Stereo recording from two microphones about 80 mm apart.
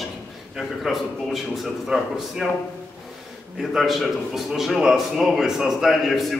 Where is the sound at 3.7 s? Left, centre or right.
Centre.